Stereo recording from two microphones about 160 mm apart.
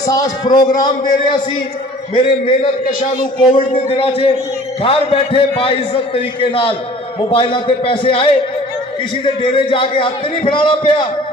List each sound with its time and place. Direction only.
0.0 s a man's voice: 20° left (ahead or behind)